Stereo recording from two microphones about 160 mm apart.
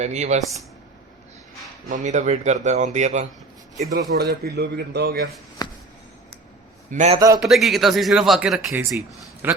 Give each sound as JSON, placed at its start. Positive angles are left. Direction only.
{"t": 0.0, "sound": "a man's voice", "side_deg": -45}
{"t": 1.9, "sound": "a man's voice", "side_deg": -50}
{"t": 3.9, "sound": "speech", "side_deg": -75}
{"t": 5.6, "sound": "a sound", "side_deg": 25}
{"t": 6.9, "sound": "a man's voice", "side_deg": -45}
{"t": 7.3, "sound": "speech", "side_deg": 0}